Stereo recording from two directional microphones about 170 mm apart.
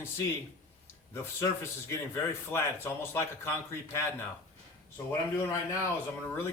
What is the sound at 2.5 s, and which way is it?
Speech, 15° left (ahead or behind).